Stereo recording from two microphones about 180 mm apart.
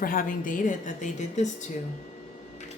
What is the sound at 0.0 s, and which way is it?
A woman's voice, 50° left (ahead or behind).